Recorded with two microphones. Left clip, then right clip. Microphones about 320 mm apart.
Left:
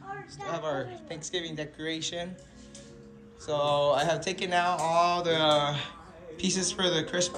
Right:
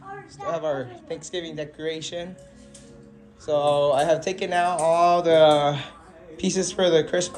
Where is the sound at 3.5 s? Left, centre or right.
Centre.